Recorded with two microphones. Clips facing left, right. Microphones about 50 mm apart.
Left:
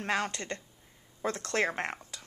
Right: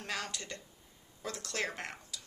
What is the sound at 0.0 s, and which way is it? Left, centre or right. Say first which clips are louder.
A woman's voice: left 8 dB; left.